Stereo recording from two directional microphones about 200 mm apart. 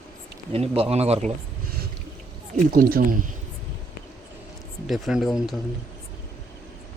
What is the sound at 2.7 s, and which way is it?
Speech, 45° right (ahead or behind).